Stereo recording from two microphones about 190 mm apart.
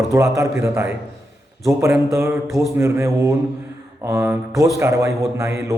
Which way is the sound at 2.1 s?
15° right (ahead or behind).